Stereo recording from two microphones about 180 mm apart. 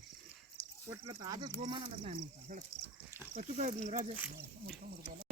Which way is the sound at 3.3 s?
40° right (ahead or behind).